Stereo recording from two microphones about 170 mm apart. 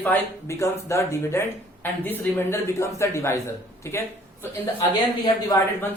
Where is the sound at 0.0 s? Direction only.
15° left (ahead or behind).